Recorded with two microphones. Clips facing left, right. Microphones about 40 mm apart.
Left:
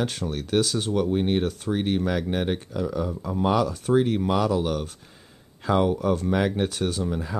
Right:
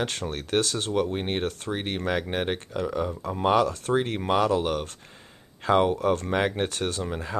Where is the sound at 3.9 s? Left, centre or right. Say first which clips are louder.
Left 3 dB; right.